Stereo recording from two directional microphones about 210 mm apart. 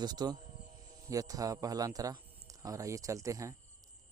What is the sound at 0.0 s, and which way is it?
A man's voice, 20° right (ahead or behind).